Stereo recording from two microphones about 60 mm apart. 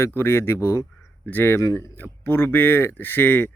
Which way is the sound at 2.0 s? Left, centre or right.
Left.